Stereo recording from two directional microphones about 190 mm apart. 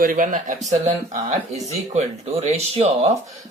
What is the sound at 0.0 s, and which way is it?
Speech, 45° right (ahead or behind).